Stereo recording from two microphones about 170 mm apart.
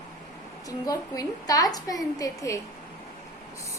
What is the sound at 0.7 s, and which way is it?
A woman's voice, 20° left (ahead or behind).